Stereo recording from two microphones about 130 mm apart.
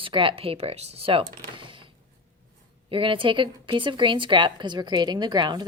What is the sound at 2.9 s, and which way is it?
A woman's voice, 40° right (ahead or behind).